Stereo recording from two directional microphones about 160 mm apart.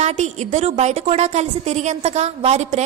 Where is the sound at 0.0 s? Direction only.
45° right (ahead or behind).